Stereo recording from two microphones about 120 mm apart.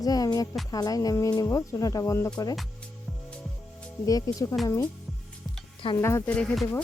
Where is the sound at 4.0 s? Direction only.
30° left (ahead or behind).